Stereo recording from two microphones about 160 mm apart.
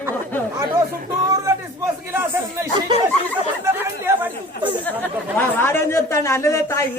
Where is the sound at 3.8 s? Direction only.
15° right (ahead or behind).